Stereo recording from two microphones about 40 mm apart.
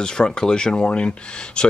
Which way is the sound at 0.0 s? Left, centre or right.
Left.